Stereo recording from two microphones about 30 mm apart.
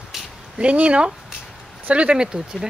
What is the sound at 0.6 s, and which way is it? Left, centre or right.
Speech, right.